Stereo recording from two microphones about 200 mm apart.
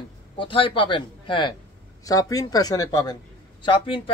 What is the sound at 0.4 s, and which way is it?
A man's voice, 25° left (ahead or behind).